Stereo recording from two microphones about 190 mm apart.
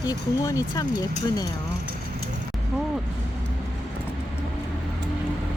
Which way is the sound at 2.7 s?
5° right (ahead or behind).